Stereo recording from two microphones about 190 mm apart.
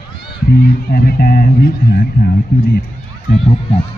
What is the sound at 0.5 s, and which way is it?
Speech, 50° left (ahead or behind).